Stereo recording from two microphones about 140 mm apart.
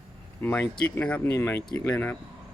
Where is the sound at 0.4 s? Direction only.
15° left (ahead or behind).